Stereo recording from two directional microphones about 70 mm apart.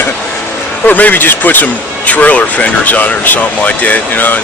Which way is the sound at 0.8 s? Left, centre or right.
Left.